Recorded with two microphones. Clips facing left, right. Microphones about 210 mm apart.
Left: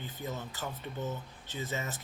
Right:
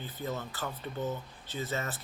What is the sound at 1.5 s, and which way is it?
Speech, 15° left (ahead or behind).